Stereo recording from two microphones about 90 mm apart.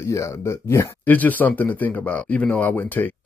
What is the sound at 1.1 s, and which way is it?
Speech, 20° left (ahead or behind).